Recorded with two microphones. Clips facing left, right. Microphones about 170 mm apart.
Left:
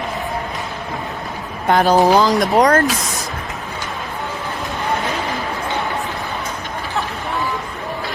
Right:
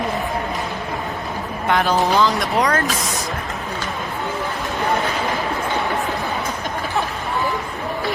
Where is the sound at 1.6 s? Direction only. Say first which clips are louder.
Left 5 dB; 40° left (ahead or behind).